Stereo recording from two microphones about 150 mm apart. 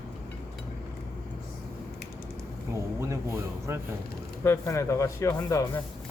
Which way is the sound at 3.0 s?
20° right (ahead or behind).